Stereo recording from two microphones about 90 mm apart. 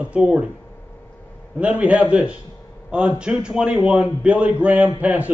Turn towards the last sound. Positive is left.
turn(degrees=-15)  # may be behind; listen again after turning